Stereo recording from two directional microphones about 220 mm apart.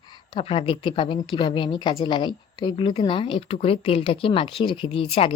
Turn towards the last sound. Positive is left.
turn(degrees=25)  # may be behind; listen again after turning